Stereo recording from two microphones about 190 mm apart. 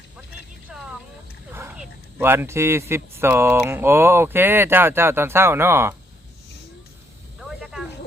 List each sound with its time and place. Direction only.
1.5 s speech: 10° right (ahead or behind)
7.3 s snake: centre (ahead or behind)